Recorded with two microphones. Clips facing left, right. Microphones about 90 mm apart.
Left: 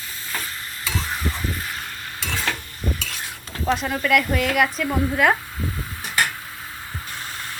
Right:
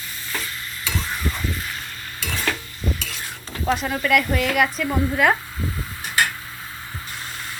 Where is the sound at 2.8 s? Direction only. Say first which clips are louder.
Even; 35° left (ahead or behind).